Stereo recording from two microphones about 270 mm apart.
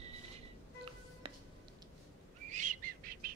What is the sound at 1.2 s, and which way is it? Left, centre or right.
Music, centre.